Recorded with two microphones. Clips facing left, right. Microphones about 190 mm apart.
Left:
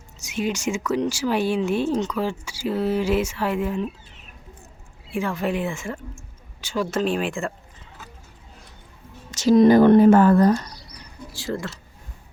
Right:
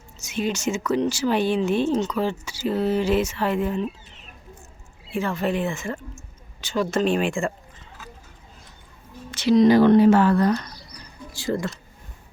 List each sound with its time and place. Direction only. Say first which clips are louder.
0.2 s speech: even; 10° left (ahead or behind)
5.1 s speech: even; 10° left (ahead or behind)
9.4 s speech: left 2 dB; 50° left (ahead or behind)
11.3 s speech: right 3 dB; centre (ahead or behind)